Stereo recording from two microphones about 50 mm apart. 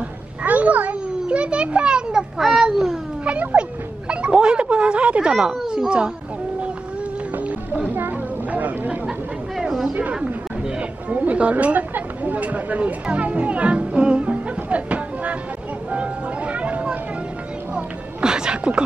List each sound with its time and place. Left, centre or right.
0.4 s a sound: right
1.2 s children playing: right
2.3 s a child's voice: centre
3.3 s cat: right
4.1 s a sound: centre
5.7 s a child's voice: centre
7.3 s music: right
7.9 s a sound: right
8.5 s chatter: right
9.6 s a sound: centre
10.1 s chatter: centre
11.1 s a child's voice: right
15.9 s music: right
17.7 s music: centre